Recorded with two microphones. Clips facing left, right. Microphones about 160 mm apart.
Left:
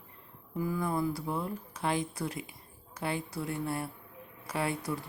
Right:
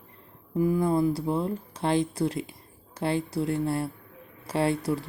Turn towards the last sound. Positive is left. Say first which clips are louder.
# right 7 dB
turn(degrees=-30)  # may be behind; listen again after turning